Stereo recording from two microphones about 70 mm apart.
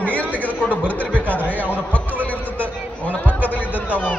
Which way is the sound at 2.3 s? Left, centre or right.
Right.